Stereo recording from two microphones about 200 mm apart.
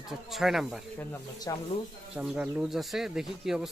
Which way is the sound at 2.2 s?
5° right (ahead or behind).